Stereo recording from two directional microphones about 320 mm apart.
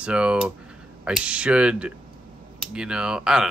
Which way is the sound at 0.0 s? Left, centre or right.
Centre.